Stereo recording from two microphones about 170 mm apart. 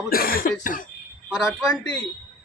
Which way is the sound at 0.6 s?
55° left (ahead or behind).